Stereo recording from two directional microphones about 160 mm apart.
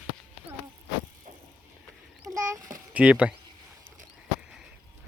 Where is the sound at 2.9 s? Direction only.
5° right (ahead or behind).